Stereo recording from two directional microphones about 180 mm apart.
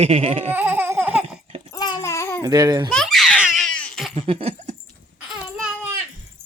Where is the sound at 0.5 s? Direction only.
10° right (ahead or behind).